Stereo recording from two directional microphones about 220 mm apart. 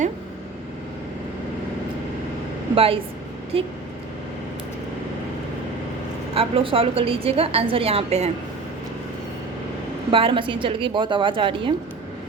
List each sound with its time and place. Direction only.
2.7 s a woman's voice: 25° right (ahead or behind)
6.3 s a woman's voice: 25° right (ahead or behind)
10.1 s a woman's voice: 25° right (ahead or behind)